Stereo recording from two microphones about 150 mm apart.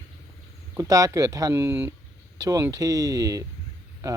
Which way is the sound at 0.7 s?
20° right (ahead or behind).